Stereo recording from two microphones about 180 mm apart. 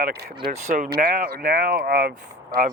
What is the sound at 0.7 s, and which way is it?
Speech, 50° right (ahead or behind).